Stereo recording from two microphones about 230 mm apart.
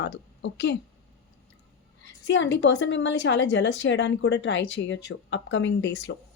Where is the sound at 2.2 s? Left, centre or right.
Left.